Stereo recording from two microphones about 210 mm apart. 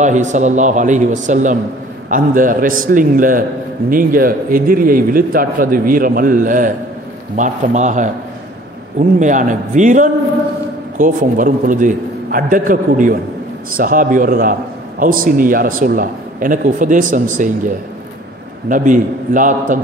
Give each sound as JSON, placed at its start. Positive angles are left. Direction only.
{"t": 0.0, "sound": "a man's voice", "side_deg": -35}
{"t": 9.2, "sound": "a man's voice", "side_deg": -35}
{"t": 18.7, "sound": "a man's voice", "side_deg": -40}